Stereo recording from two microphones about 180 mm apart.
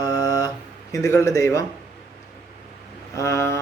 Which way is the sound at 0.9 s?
15° left (ahead or behind).